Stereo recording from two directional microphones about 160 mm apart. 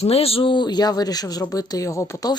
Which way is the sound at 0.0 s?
40° left (ahead or behind).